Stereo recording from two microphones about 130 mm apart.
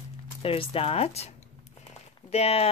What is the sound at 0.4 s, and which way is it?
Speech, 45° left (ahead or behind).